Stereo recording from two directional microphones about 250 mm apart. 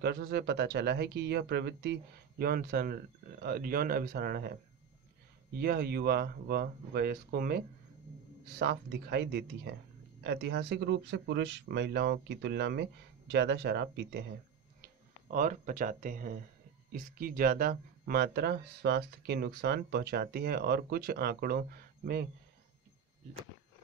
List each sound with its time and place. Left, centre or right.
0.0 s speech: right
5.6 s speech: right
15.2 s speech: right